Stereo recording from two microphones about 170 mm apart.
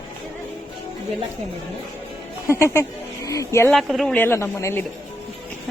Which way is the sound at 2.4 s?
15° left (ahead or behind).